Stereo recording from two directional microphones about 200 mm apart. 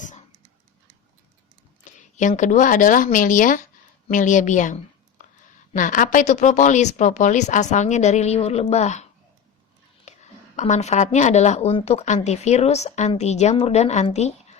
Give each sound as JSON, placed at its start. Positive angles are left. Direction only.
{"t": 1.8, "sound": "a woman's voice", "side_deg": 40}
{"t": 10.1, "sound": "a sound", "side_deg": 35}
{"t": 10.6, "sound": "speech", "side_deg": 35}